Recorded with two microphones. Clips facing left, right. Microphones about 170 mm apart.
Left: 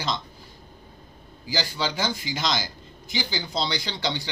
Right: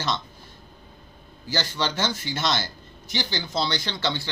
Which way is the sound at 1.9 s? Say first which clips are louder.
Right 1 dB; 10° left (ahead or behind).